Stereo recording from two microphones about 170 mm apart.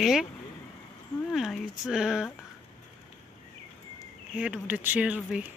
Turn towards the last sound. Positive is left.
turn(degrees=-5)  # may be behind; listen again after turning